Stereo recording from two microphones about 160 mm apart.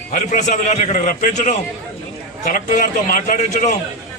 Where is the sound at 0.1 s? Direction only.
50° left (ahead or behind).